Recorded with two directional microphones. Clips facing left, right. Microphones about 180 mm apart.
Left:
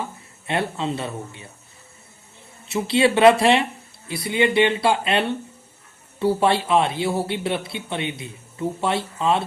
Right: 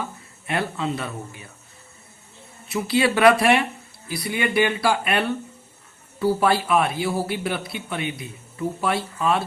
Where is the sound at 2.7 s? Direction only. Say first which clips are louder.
Left 2 dB; 25° left (ahead or behind).